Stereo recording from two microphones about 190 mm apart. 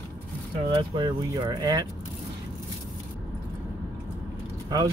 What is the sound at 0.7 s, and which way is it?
Speech, 25° right (ahead or behind).